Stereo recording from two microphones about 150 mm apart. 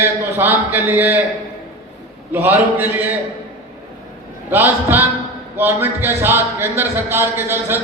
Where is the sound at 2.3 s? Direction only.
10° right (ahead or behind).